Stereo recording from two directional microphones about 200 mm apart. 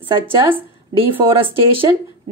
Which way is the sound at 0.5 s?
25° right (ahead or behind).